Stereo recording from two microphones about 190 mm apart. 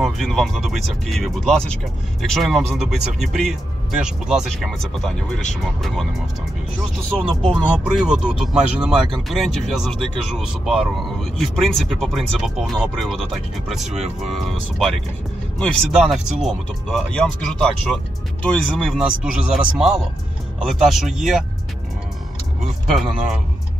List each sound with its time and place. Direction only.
0.0 s speech: centre (ahead or behind)
13.9 s speech: 35° right (ahead or behind)
14.3 s speech: centre (ahead or behind)